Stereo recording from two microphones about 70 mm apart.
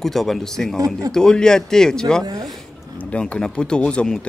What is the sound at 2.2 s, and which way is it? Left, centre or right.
Speech, right.